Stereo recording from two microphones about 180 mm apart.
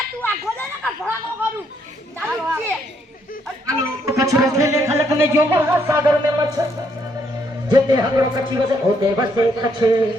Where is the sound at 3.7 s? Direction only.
20° right (ahead or behind).